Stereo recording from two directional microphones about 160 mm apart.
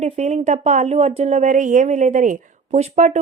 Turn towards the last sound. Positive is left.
turn(degrees=-45)  # may be behind; listen again after turning